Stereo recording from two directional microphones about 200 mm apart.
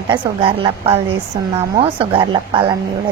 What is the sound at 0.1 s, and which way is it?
Speech, 25° right (ahead or behind).